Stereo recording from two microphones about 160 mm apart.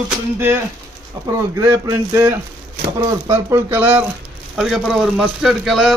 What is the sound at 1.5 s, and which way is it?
Speech, 20° right (ahead or behind).